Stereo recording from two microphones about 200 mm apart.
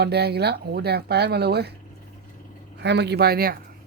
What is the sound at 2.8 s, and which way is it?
Speech, 55° right (ahead or behind).